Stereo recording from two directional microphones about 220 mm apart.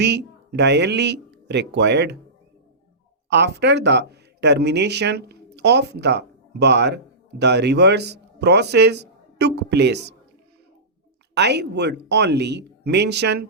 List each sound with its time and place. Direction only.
0.0 s speech: 50° right (ahead or behind)
3.2 s speech: 50° right (ahead or behind)
11.3 s speech: 50° right (ahead or behind)